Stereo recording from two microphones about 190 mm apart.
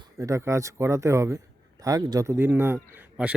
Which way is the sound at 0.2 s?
15° right (ahead or behind).